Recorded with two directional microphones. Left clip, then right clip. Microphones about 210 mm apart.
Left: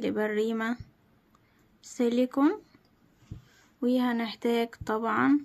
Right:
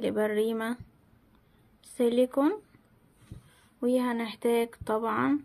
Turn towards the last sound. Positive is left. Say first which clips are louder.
# left 2 dB
turn(degrees=10)  # may be behind; listen again after turning